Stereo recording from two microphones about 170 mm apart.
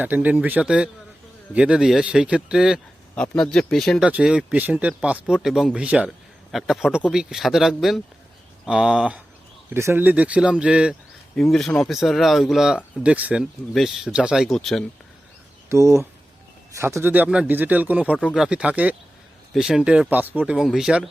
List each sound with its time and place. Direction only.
0.0 s speech: 10° right (ahead or behind)
15.7 s speech: 15° right (ahead or behind)